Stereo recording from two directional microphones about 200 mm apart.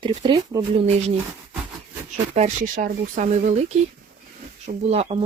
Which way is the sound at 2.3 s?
40° right (ahead or behind).